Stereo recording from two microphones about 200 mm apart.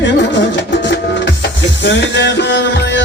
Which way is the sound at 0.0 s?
60° left (ahead or behind).